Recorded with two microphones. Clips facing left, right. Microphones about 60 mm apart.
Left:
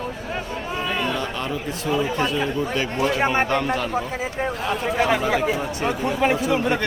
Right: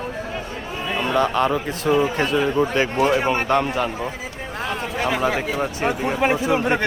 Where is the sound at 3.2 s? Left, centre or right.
Left.